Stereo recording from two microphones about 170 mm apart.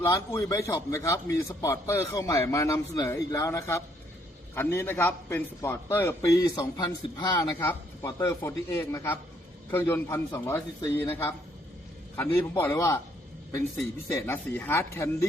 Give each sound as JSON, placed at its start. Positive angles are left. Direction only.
{"t": 0.0, "sound": "a man's voice", "side_deg": 15}
{"t": 14.1, "sound": "a man's voice", "side_deg": 15}